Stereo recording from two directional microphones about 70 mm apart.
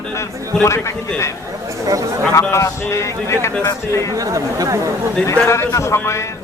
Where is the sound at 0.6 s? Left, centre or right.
Left.